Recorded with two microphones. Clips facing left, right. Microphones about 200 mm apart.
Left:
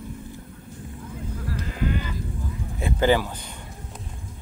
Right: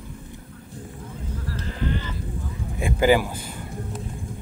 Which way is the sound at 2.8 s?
10° right (ahead or behind).